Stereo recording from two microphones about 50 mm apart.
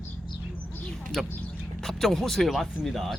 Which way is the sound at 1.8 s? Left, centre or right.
Centre.